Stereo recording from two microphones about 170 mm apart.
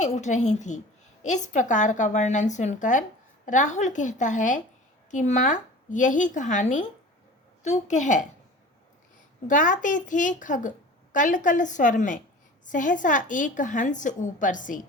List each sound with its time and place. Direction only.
0.0 s a woman's voice: 45° left (ahead or behind)
9.5 s a woman's voice: 50° left (ahead or behind)